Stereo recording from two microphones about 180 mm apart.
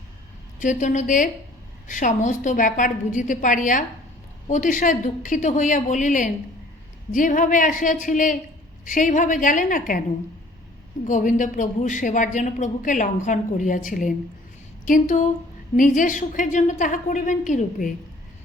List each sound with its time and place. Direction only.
0.6 s a man's voice: 45° left (ahead or behind)
11.0 s a man's voice: 45° left (ahead or behind)